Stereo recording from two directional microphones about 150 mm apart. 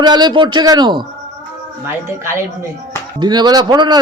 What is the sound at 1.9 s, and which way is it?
Speech, 15° right (ahead or behind).